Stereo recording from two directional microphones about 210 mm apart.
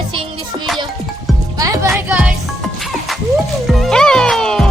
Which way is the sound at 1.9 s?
5° right (ahead or behind).